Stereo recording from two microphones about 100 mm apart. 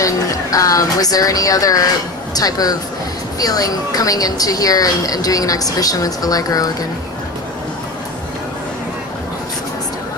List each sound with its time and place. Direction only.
0.0 s a woman's voice: 35° left (ahead or behind)